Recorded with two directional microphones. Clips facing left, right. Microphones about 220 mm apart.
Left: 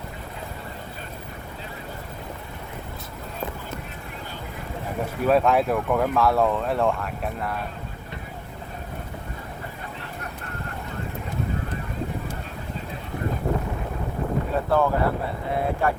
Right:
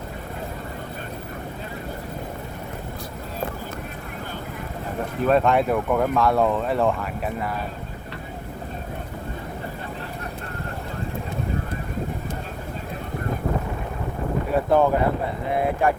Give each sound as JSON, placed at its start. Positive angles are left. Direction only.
{"t": 5.2, "sound": "speech", "side_deg": 5}
{"t": 14.7, "sound": "speech", "side_deg": -20}